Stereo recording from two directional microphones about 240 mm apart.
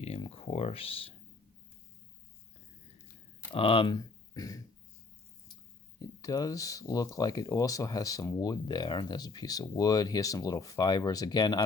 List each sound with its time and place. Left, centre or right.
0.0 s speech: left
3.5 s speech: left
4.4 s a sound: centre
6.0 s speech: centre